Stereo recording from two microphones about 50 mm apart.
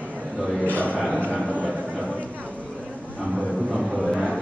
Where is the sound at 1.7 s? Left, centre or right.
Right.